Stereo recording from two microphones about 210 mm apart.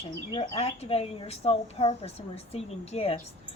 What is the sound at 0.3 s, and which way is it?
A woman's voice, 30° left (ahead or behind).